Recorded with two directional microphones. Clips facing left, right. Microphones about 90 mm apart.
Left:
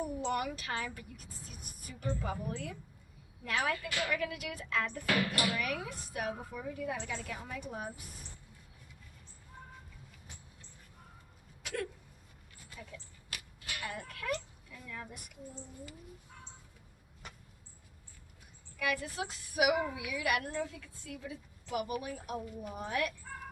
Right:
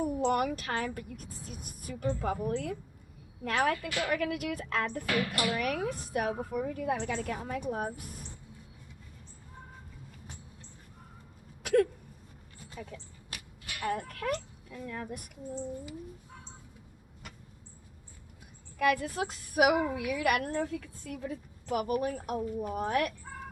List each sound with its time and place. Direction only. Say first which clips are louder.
0.0 s a woman's voice: right 6 dB; 50° right (ahead or behind)
11.6 s hiccup: right 13 dB; 50° right (ahead or behind)
12.9 s speech: right 3 dB; 35° right (ahead or behind)
18.8 s a woman's voice: right 7 dB; 50° right (ahead or behind)